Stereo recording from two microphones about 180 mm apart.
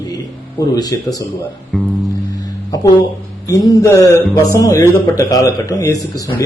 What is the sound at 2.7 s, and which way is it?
A man's voice, 20° left (ahead or behind).